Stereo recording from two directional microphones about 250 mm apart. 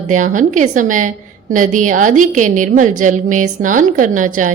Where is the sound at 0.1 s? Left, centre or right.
Right.